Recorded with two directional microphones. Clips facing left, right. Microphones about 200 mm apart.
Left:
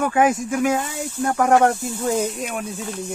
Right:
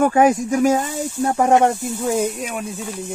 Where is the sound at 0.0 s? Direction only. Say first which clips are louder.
Right 4 dB; 35° right (ahead or behind).